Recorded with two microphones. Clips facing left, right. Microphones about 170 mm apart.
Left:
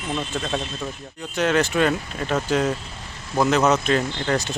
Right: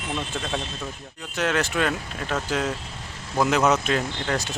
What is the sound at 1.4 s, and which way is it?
Speech, 5° right (ahead or behind).